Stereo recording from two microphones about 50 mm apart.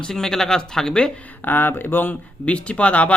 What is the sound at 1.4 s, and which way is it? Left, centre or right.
Speech, left.